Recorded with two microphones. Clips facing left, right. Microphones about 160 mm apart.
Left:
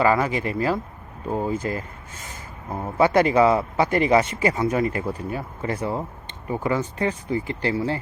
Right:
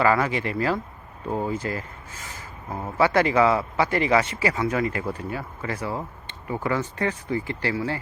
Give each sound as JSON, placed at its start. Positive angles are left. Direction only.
{"t": 0.0, "sound": "speech", "side_deg": 20}
{"t": 1.3, "sound": "speech", "side_deg": 15}